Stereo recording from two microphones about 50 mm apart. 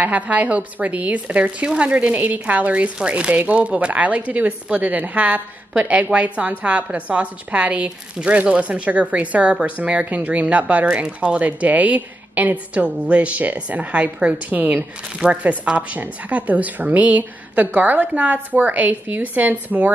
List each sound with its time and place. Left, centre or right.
0.0 s a woman's voice: right